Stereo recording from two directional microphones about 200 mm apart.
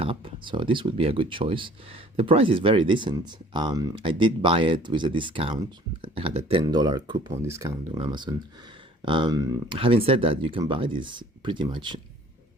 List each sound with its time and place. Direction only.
0.0 s speech: 25° right (ahead or behind)